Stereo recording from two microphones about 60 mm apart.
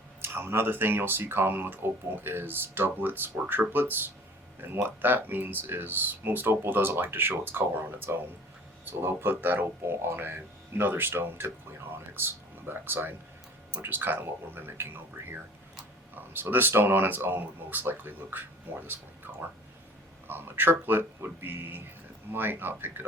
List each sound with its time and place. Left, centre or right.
0.2 s speech: right
20.2 s speech: right